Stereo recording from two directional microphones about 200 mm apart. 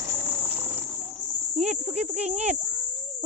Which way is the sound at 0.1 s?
10° right (ahead or behind).